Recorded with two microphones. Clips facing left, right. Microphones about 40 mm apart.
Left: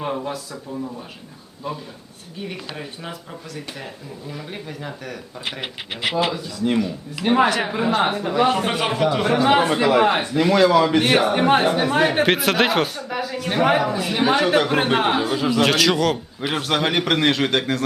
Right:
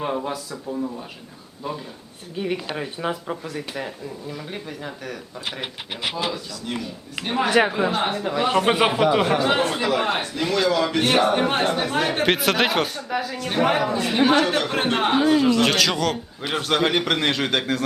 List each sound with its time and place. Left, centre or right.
0.0 s a man's voice: centre
2.5 s speech: centre
4.3 s a man's voice: centre
6.1 s speech: centre
7.7 s a man's voice: centre
8.6 s a man's voice: centre
9.2 s a man's voice: centre